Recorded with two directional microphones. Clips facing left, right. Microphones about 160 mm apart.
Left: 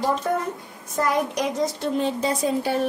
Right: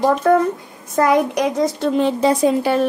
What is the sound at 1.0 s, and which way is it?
A woman's voice, 75° right (ahead or behind).